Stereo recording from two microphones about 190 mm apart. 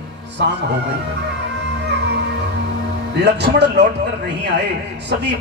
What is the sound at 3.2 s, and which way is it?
Speech, 60° right (ahead or behind).